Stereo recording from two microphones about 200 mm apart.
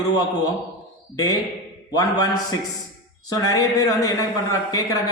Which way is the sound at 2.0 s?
20° left (ahead or behind).